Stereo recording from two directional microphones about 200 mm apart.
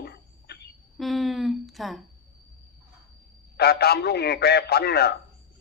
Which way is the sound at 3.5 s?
50° left (ahead or behind).